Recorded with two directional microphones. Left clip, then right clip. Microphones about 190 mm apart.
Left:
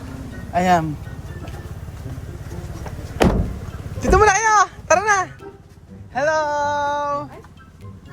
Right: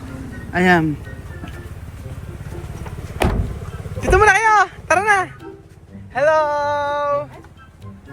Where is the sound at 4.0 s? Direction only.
20° left (ahead or behind).